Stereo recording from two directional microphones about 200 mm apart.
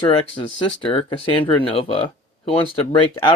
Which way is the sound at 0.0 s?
25° left (ahead or behind).